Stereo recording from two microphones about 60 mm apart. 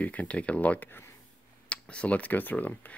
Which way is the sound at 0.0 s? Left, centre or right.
Left.